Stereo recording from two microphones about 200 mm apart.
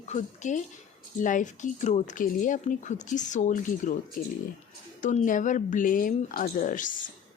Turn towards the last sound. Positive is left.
turn(degrees=40)  # may be behind; listen again after turning